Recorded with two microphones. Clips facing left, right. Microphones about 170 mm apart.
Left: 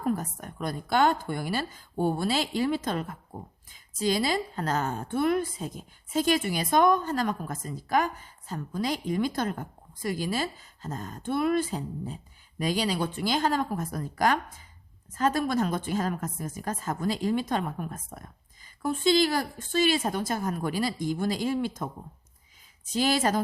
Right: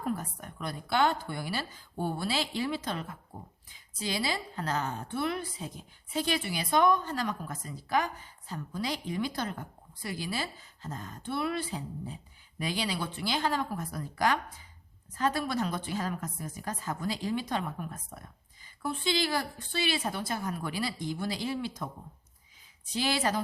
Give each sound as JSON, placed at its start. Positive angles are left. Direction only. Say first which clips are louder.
{"t": 0.0, "sound": "a woman's voice", "louder": "left 5 dB", "side_deg": 45}
{"t": 22.9, "sound": "a woman's voice", "louder": "left 5 dB", "side_deg": 45}